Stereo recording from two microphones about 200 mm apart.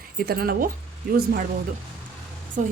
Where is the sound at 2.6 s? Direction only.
40° right (ahead or behind).